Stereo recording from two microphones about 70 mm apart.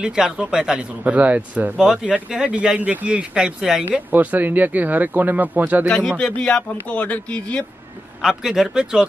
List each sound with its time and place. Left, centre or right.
0.0 s speech: centre
4.1 s speech: right
6.1 s speech: centre
8.2 s speech: centre